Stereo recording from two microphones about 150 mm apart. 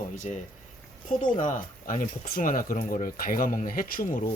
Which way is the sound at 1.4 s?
60° left (ahead or behind).